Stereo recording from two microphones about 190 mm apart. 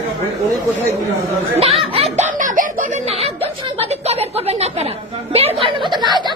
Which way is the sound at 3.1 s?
30° right (ahead or behind).